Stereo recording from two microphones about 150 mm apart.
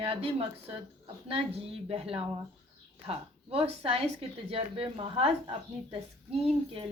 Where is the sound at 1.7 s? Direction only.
40° right (ahead or behind).